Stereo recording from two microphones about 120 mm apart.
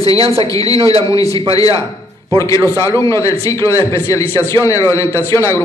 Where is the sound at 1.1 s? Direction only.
30° left (ahead or behind).